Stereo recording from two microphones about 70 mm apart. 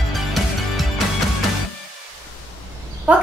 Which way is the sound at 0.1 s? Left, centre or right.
Centre.